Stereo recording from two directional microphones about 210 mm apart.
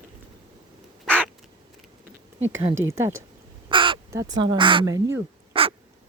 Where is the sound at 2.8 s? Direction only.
15° right (ahead or behind).